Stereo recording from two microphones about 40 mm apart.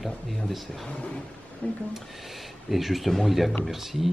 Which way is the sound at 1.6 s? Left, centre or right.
Left.